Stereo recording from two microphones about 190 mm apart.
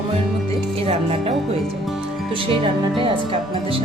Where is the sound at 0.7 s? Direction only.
30° right (ahead or behind).